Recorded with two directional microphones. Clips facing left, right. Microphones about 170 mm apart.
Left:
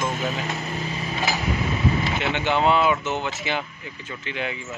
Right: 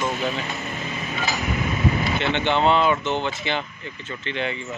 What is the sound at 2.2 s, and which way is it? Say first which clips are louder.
Speech: right 2 dB; 10° left (ahead or behind).